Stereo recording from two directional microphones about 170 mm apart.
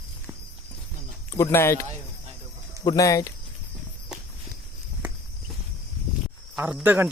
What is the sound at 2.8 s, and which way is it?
Speech, 20° left (ahead or behind).